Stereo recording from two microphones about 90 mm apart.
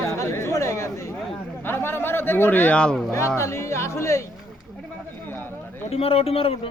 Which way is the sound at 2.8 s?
5° left (ahead or behind).